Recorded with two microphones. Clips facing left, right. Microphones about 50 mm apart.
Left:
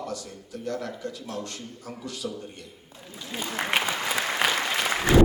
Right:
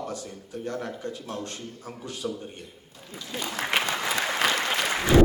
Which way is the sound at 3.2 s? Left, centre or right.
Centre.